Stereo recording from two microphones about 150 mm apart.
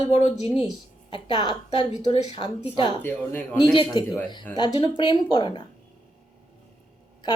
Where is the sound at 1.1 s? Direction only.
30° left (ahead or behind).